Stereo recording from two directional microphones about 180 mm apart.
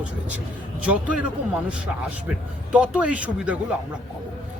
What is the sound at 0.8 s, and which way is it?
Speech, 5° right (ahead or behind).